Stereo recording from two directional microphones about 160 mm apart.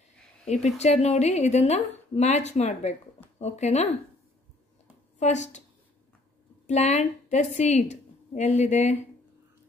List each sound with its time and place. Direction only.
0.7 s a woman's voice: 45° left (ahead or behind)
5.2 s a woman's voice: 45° left (ahead or behind)
6.7 s a woman's voice: 45° left (ahead or behind)